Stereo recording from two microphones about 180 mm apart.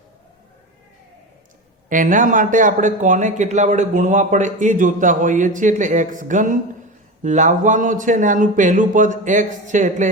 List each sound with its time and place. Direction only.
1.9 s speech: 45° right (ahead or behind)